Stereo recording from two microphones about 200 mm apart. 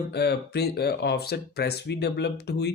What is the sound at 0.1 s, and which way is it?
Speech, 55° left (ahead or behind).